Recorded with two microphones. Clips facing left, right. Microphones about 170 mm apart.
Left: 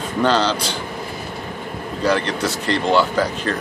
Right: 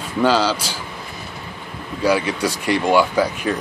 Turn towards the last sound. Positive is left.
turn(degrees=-10)  # may be behind; listen again after turning